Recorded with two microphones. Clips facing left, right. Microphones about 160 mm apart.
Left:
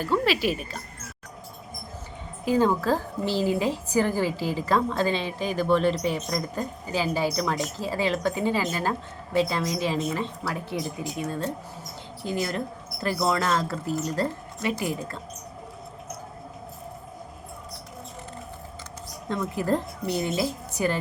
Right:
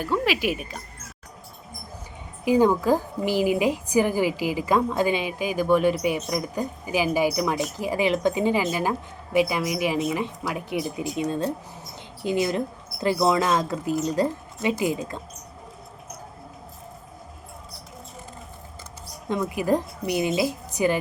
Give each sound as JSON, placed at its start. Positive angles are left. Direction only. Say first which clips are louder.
{"t": 0.0, "sound": "a woman's voice", "louder": "even", "side_deg": -15}
{"t": 2.4, "sound": "a woman's voice", "louder": "right 3 dB", "side_deg": -15}
{"t": 19.3, "sound": "a woman's voice", "louder": "right 3 dB", "side_deg": -15}